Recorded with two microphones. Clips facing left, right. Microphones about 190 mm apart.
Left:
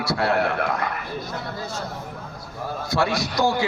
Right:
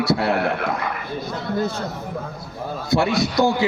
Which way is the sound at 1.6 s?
60° right (ahead or behind).